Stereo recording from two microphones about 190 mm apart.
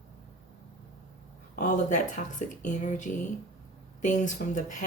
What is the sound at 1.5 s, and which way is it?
Speech, 40° left (ahead or behind).